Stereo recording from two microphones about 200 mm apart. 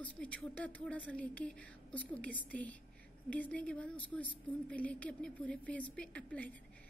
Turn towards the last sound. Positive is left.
turn(degrees=5)  # may be behind; listen again after turning